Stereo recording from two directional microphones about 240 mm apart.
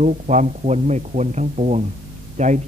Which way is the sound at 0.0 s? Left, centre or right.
Right.